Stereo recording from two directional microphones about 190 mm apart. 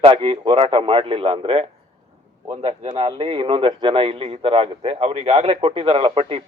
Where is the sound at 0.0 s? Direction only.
30° right (ahead or behind).